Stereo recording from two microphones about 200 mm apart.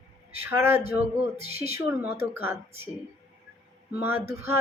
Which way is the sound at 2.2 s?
10° right (ahead or behind).